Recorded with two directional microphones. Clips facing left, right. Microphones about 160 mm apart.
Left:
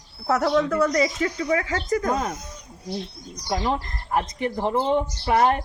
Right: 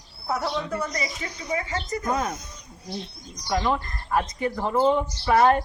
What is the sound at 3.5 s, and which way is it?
Speech, 35° left (ahead or behind).